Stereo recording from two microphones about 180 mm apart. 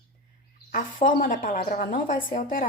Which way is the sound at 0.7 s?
50° left (ahead or behind).